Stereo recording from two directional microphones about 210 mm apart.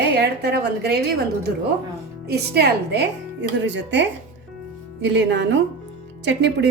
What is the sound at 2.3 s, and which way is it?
A woman's voice, 50° right (ahead or behind).